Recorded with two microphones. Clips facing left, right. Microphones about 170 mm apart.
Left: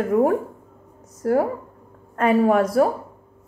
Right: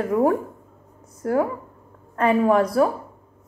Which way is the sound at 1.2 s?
40° left (ahead or behind).